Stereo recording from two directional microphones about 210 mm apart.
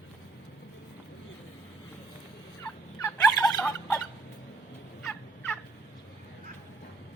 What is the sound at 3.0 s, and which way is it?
Gobble, 10° left (ahead or behind).